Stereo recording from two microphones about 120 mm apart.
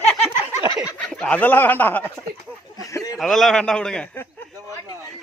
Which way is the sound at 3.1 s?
Centre (ahead or behind).